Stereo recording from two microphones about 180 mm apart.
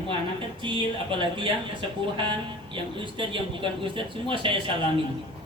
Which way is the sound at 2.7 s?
30° right (ahead or behind).